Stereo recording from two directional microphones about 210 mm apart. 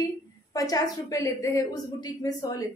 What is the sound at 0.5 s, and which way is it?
A woman's voice, 15° left (ahead or behind).